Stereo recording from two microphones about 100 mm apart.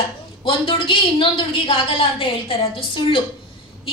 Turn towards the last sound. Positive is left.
turn(degrees=60)  # may be behind; listen again after turning